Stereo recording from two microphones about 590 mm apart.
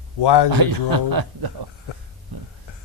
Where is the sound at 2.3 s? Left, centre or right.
Right.